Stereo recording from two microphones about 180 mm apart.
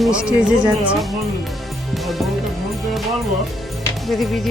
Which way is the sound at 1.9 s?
Centre (ahead or behind).